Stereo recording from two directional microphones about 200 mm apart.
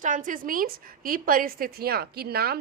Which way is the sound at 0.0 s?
40° right (ahead or behind).